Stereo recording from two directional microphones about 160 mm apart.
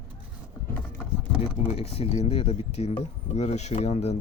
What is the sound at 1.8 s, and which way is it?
Speech, 40° left (ahead or behind).